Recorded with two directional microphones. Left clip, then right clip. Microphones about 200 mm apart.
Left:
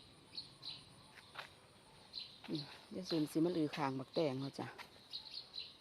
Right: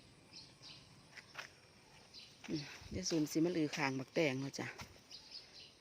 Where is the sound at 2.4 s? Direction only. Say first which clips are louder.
Right 5 dB; 15° right (ahead or behind).